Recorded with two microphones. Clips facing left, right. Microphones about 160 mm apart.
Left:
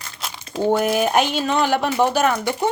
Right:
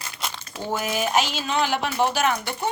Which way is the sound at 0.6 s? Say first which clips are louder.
Left 8 dB; 55° left (ahead or behind).